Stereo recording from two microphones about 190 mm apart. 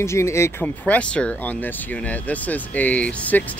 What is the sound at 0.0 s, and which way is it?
Speech, 15° left (ahead or behind).